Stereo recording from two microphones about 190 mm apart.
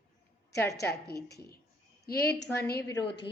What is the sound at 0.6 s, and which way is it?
Speech, 60° left (ahead or behind).